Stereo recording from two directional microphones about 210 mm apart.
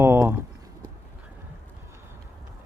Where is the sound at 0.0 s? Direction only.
15° right (ahead or behind).